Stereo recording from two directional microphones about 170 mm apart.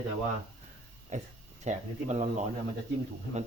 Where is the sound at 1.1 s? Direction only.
45° right (ahead or behind).